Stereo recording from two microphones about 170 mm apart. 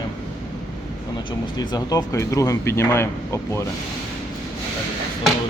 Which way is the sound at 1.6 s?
20° left (ahead or behind).